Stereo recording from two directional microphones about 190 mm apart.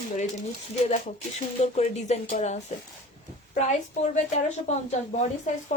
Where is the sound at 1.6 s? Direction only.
35° left (ahead or behind).